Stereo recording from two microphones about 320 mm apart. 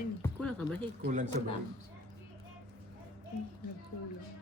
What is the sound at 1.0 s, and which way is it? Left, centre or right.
Speech, right.